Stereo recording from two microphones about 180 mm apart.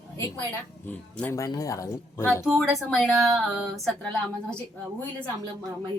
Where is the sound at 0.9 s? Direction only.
10° left (ahead or behind).